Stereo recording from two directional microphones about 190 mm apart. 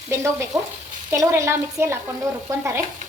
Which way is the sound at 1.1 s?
15° right (ahead or behind).